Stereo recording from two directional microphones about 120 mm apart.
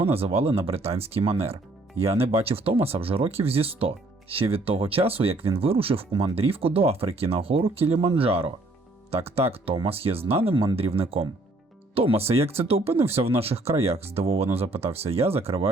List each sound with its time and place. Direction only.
0.0 s speech: 55° right (ahead or behind)